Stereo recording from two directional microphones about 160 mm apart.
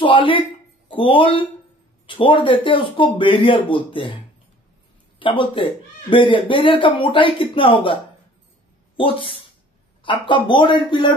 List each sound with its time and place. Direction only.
0.0 s speech: 30° left (ahead or behind)
5.2 s speech: 30° left (ahead or behind)